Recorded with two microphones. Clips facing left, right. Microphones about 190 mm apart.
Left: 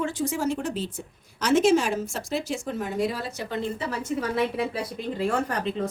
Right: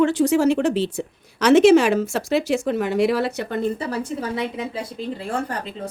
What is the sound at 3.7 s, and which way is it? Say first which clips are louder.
Speech: right 3 dB; 35° right (ahead or behind).